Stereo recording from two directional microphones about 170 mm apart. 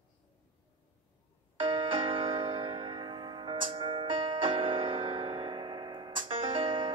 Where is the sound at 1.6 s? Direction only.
30° right (ahead or behind).